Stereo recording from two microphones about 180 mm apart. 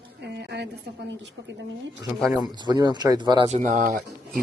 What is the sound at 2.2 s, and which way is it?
Speech, 5° right (ahead or behind).